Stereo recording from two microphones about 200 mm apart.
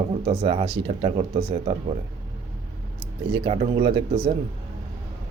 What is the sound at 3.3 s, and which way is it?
Speech, 25° right (ahead or behind).